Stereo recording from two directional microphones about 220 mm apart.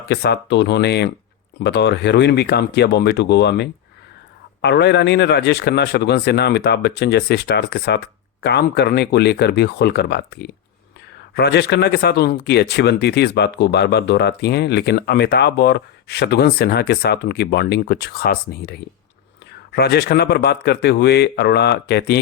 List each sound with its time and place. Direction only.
0.1 s speech: 50° left (ahead or behind)